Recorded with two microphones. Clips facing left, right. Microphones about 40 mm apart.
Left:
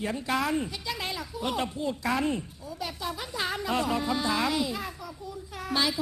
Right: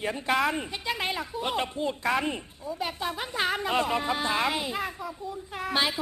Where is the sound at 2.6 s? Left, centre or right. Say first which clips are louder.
Right 3 dB; right.